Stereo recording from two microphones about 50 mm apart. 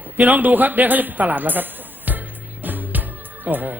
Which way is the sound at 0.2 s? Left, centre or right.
Right.